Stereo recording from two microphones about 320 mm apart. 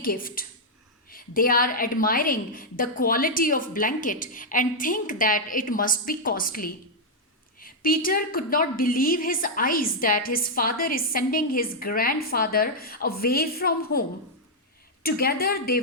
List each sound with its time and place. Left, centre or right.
0.0 s a woman's voice: left
15.0 s a woman's voice: left